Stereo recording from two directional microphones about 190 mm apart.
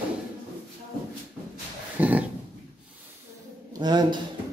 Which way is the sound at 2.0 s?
10° right (ahead or behind).